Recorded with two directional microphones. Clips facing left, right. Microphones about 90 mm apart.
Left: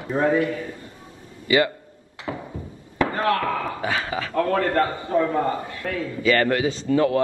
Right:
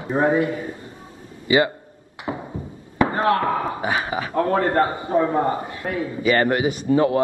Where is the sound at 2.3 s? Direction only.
30° right (ahead or behind).